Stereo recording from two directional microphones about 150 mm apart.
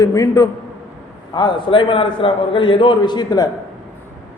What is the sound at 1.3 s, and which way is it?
A man's voice, 30° left (ahead or behind).